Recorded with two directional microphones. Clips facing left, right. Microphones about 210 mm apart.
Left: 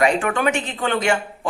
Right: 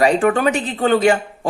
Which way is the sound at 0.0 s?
35° right (ahead or behind).